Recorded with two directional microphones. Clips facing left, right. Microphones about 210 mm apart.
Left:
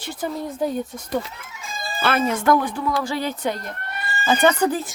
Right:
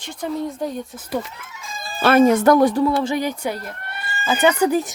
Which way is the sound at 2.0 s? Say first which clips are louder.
Right 7 dB; 40° right (ahead or behind).